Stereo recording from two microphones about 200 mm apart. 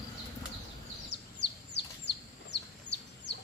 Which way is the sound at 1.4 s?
60° left (ahead or behind).